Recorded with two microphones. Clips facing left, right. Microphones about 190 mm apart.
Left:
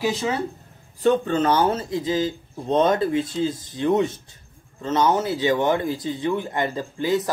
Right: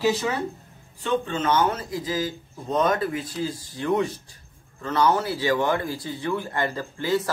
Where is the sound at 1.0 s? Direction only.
40° left (ahead or behind).